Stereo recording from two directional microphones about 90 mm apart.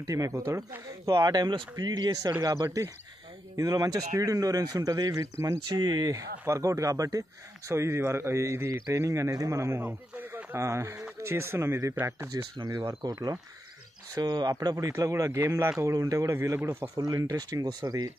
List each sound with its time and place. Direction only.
0.0 s speech: 35° right (ahead or behind)
5.8 s speech: 55° right (ahead or behind)
6.4 s speech: 35° right (ahead or behind)
12.3 s speech: 45° right (ahead or behind)
14.1 s speech: 55° right (ahead or behind)
15.0 s speech: 35° right (ahead or behind)